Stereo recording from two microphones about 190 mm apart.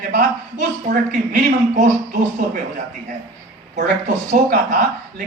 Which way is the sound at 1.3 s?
45° right (ahead or behind).